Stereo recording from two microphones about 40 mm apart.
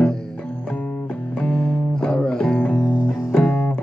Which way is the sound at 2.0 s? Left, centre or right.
Left.